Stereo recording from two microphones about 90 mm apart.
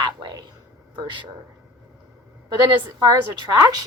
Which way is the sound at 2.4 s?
55° right (ahead or behind).